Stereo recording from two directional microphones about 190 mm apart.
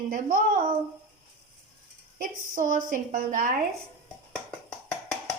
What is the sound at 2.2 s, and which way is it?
A woman's voice, 45° right (ahead or behind).